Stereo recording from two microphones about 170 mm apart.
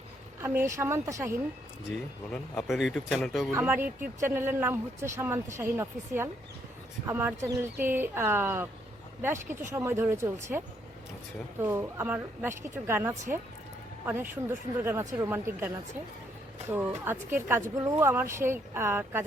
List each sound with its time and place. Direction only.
0.4 s speech: 15° right (ahead or behind)
2.3 s speech: centre (ahead or behind)
3.5 s speech: 10° right (ahead or behind)
11.6 s speech: 15° right (ahead or behind)